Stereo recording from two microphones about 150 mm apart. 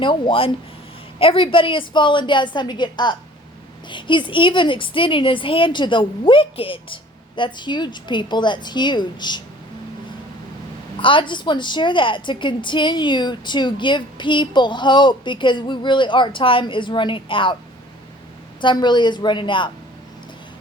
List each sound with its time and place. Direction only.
0.0 s a woman's voice: 35° left (ahead or behind)
11.0 s a woman's voice: 35° left (ahead or behind)
18.6 s a woman's voice: 30° left (ahead or behind)